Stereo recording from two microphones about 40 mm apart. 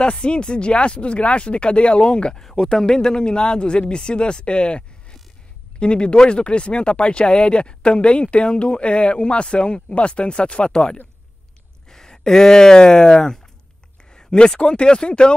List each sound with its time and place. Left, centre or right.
0.0 s speech: left